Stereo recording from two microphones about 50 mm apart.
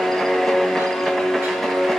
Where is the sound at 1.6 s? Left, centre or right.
Centre.